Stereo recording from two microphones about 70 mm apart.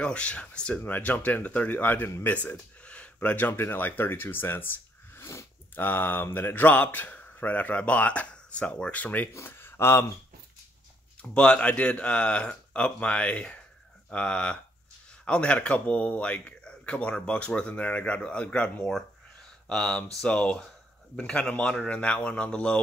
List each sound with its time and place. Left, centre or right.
0.0 s a man's voice: centre; by 5.5 s left
5.8 s a man's voice: left
9.3 s speech: left
11.3 s speech: centre